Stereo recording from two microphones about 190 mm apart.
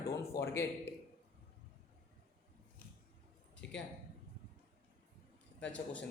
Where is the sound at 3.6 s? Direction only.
70° left (ahead or behind).